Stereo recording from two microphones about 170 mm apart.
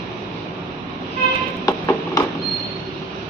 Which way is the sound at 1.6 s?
25° left (ahead or behind).